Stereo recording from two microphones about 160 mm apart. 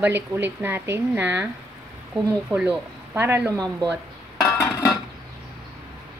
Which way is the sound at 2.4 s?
5° right (ahead or behind).